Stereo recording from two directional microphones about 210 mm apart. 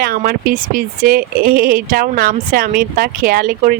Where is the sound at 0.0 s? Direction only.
45° right (ahead or behind).